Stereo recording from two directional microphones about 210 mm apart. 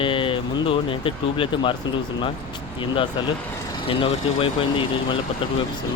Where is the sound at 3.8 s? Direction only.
25° left (ahead or behind).